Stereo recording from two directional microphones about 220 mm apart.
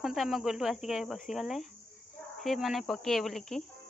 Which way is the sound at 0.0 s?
Centre (ahead or behind).